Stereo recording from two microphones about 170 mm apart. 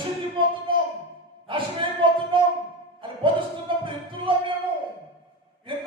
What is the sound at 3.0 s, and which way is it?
Music, 30° right (ahead or behind).